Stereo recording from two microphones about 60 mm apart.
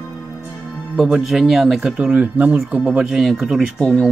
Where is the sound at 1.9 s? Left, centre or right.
Centre.